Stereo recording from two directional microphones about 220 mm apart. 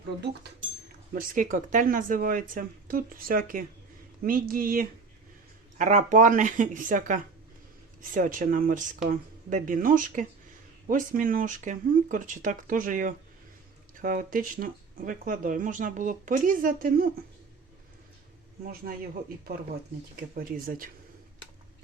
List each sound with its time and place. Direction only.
1.1 s speech: 35° right (ahead or behind)
18.6 s speech: 40° right (ahead or behind)
20.1 s speech: 40° right (ahead or behind)